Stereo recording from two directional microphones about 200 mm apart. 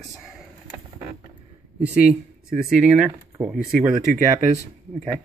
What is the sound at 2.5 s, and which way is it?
Speech, 5° right (ahead or behind).